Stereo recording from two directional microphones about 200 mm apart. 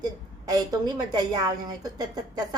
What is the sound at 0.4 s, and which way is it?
A woman's voice, 20° right (ahead or behind).